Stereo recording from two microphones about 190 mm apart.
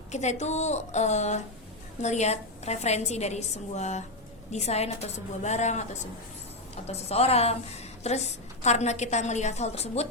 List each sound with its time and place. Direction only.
0.1 s a woman's voice: 35° left (ahead or behind)
6.8 s a woman's voice: 35° left (ahead or behind)